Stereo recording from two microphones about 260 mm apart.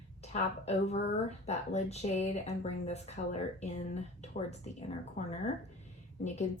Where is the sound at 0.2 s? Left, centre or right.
Left.